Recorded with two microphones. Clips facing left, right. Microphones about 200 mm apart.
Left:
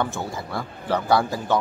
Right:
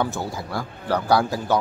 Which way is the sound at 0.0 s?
Centre (ahead or behind).